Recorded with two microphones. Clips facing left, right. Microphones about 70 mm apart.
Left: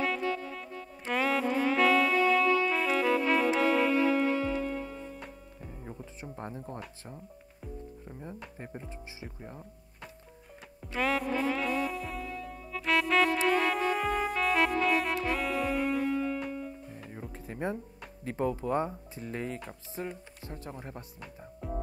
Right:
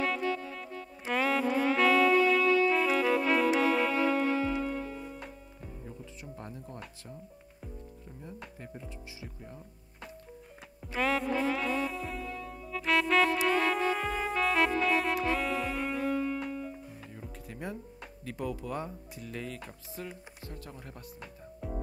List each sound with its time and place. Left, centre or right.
0.0 s music: centre
5.9 s music: left
8.5 s speech: left
11.0 s music: centre
11.7 s music: centre
12.7 s music: centre
17.3 s music: left
18.2 s speech: left
21.6 s music: centre